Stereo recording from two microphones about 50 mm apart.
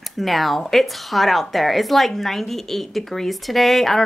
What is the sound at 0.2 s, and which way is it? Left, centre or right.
Speech, centre.